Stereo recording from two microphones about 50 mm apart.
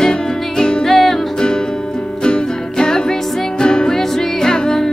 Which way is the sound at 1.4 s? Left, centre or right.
Centre.